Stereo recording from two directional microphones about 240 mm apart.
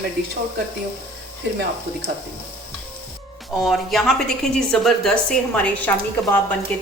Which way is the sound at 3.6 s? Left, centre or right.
Centre.